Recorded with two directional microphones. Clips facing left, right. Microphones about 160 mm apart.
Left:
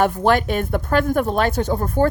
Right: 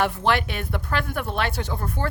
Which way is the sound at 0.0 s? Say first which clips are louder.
Left 5 dB; 45° left (ahead or behind).